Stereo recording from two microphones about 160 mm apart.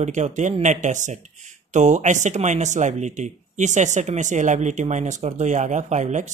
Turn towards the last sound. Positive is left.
turn(degrees=-50)  # may be behind; listen again after turning